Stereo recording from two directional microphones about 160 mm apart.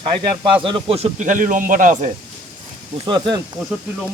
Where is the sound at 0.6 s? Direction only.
30° right (ahead or behind); by 2.1 s 55° right (ahead or behind).